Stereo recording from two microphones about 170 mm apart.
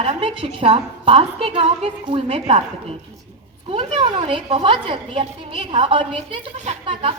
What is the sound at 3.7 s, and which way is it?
A woman's voice, 30° right (ahead or behind).